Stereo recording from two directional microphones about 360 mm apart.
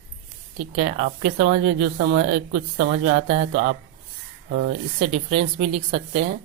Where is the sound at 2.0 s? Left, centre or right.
Right.